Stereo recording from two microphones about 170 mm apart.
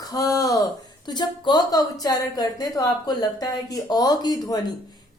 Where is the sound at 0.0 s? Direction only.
20° left (ahead or behind).